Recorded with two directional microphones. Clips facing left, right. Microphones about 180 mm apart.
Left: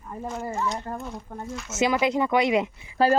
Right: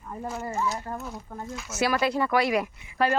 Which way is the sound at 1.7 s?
20° left (ahead or behind).